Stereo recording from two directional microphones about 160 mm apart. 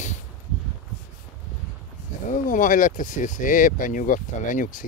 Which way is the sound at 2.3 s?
55° left (ahead or behind).